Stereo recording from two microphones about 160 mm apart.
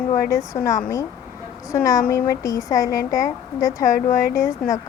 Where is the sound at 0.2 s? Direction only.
20° left (ahead or behind).